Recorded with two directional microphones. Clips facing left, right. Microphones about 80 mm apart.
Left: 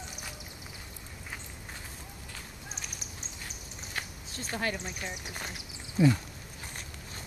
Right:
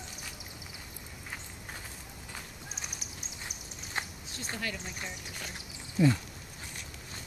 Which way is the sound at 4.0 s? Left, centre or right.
Right.